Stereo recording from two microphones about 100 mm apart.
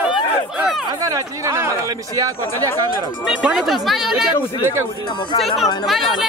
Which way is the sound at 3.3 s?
5° right (ahead or behind).